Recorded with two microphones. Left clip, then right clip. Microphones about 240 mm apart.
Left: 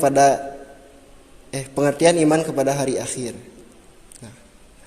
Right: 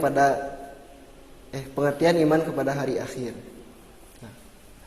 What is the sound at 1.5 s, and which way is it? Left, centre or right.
A man's voice, left.